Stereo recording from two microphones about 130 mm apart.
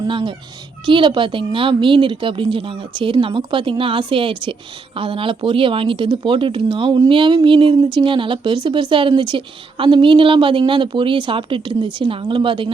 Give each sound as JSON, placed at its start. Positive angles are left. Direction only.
{"t": 0.1, "sound": "speech", "side_deg": -40}